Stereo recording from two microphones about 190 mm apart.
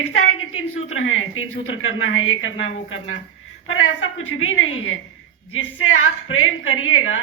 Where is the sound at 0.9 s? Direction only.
90° left.